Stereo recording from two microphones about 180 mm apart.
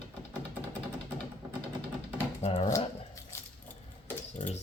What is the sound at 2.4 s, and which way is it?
Speech, 35° left (ahead or behind).